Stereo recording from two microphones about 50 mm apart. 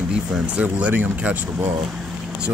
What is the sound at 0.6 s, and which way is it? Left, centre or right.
Speech, right.